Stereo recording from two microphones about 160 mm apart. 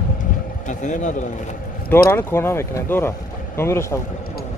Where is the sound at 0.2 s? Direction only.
50° left (ahead or behind).